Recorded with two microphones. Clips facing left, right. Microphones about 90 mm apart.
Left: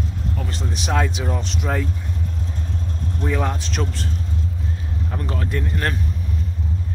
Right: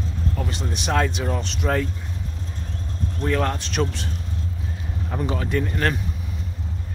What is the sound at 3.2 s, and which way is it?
Speech, 5° left (ahead or behind).